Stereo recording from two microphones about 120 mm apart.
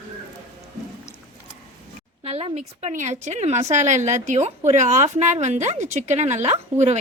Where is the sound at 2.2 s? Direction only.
60° right (ahead or behind).